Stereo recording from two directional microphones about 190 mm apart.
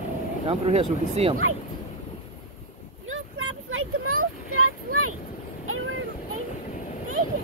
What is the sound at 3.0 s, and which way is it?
Vehicle, 90° right.